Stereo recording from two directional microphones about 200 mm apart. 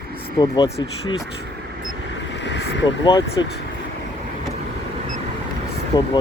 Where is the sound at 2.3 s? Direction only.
65° left (ahead or behind).